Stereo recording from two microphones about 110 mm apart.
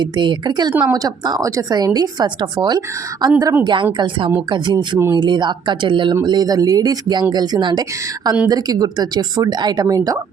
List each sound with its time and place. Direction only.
0.0 s speech: 45° right (ahead or behind)
0.7 s speech: 15° right (ahead or behind)
0.9 s a woman's voice: 35° right (ahead or behind)
3.3 s a woman's voice: 25° right (ahead or behind)
3.6 s a woman's voice: 45° right (ahead or behind)